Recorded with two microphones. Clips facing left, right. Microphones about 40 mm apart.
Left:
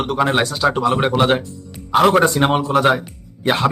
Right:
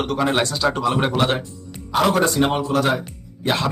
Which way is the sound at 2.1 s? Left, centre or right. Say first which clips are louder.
Left 4 dB; left.